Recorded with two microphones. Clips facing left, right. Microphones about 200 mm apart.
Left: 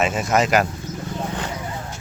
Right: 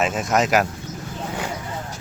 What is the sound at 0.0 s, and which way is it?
Speech, centre (ahead or behind).